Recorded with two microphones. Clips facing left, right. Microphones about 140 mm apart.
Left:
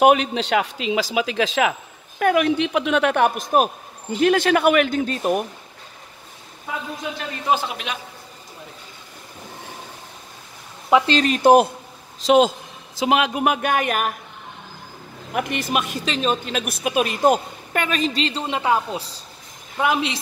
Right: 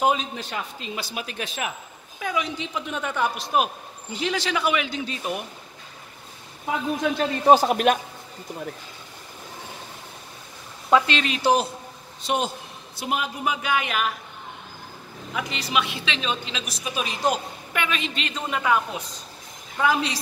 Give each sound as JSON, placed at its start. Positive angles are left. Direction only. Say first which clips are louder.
{"t": 0.0, "sound": "a woman's voice", "louder": "left 8 dB", "side_deg": 70}
{"t": 7.4, "sound": "a man's voice", "louder": "right 7 dB", "side_deg": -40}
{"t": 11.1, "sound": "a woman's voice", "louder": "left 7 dB", "side_deg": 40}
{"t": 12.2, "sound": "a man's voice", "louder": "left 10 dB", "side_deg": 90}
{"t": 15.3, "sound": "a woman's voice", "louder": "left 4 dB", "side_deg": 55}
{"t": 19.8, "sound": "a woman's voice", "louder": "left 2 dB", "side_deg": 20}